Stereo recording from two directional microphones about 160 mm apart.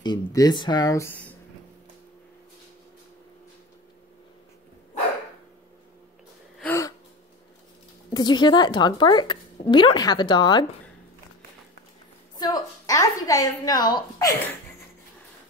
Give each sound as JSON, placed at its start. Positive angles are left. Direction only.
{"t": 0.0, "sound": "a woman's voice", "side_deg": 25}
{"t": 6.6, "sound": "gasp", "side_deg": 15}
{"t": 8.1, "sound": "a woman's voice", "side_deg": 25}
{"t": 12.4, "sound": "a woman's voice", "side_deg": 25}